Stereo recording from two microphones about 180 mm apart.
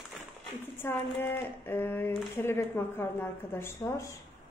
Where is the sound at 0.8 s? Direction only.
10° left (ahead or behind).